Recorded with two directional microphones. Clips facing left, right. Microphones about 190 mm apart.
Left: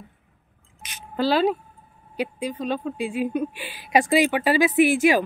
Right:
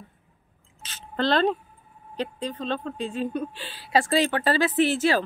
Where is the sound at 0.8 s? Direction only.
10° left (ahead or behind).